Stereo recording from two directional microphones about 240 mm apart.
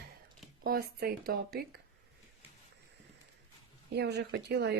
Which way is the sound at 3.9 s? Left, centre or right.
Right.